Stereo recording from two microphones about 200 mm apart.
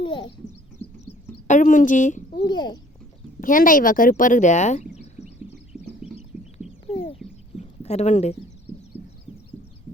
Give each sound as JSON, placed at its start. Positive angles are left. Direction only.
{"t": 0.0, "sound": "bird", "side_deg": 25}
{"t": 1.5, "sound": "a woman's voice", "side_deg": 40}
{"t": 2.4, "sound": "a child's voice", "side_deg": 20}
{"t": 3.4, "sound": "speech", "side_deg": 45}
{"t": 5.7, "sound": "horse", "side_deg": 0}
{"t": 6.1, "sound": "a sound", "side_deg": 30}
{"t": 7.8, "sound": "speech", "side_deg": 30}
{"t": 9.0, "sound": "heart murmur", "side_deg": 35}